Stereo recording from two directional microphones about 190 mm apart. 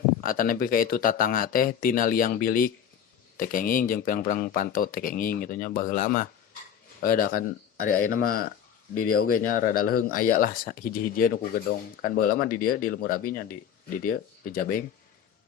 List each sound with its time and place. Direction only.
0.2 s speech: 45° left (ahead or behind)